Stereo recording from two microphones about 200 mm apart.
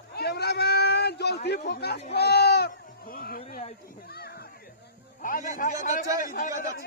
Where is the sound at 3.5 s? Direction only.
35° left (ahead or behind).